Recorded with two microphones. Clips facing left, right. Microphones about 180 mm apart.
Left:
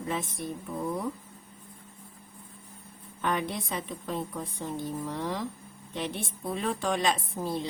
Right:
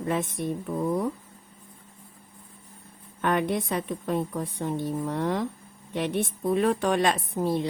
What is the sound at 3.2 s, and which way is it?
A woman's voice, 60° right (ahead or behind).